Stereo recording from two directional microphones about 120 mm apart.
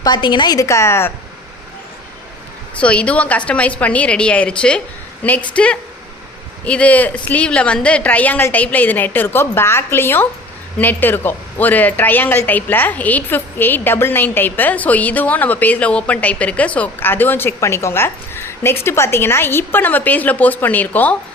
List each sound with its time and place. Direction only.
0.0 s a woman's voice: 40° left (ahead or behind); by 1.1 s 20° left (ahead or behind)
2.8 s a woman's voice: 10° left (ahead or behind)